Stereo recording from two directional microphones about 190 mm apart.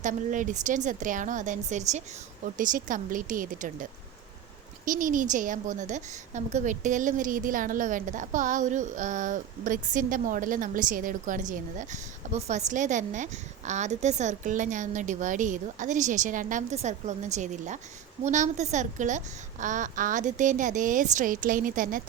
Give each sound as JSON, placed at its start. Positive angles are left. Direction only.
{"t": 0.0, "sound": "a woman's voice", "side_deg": -40}
{"t": 4.9, "sound": "a woman's voice", "side_deg": -45}